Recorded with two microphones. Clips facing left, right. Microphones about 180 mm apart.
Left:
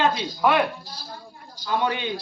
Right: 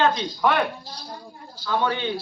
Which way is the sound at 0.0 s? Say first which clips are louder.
Even; 5° left (ahead or behind).